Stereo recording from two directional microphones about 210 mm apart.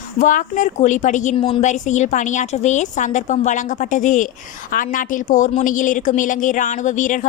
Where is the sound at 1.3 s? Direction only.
25° left (ahead or behind).